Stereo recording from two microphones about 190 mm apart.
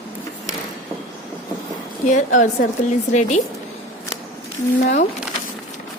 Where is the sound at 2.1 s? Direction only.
40° left (ahead or behind).